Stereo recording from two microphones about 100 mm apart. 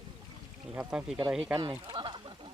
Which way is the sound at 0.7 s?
10° right (ahead or behind).